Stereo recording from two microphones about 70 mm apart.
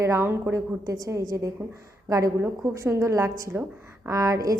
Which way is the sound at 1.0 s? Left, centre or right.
Right.